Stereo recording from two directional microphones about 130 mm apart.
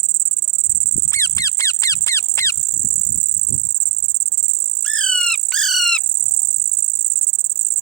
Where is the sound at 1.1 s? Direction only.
25° left (ahead or behind).